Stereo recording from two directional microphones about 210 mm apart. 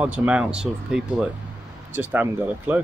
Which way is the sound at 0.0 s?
5° right (ahead or behind).